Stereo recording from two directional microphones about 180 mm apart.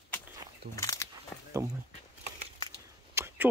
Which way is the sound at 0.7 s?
20° left (ahead or behind).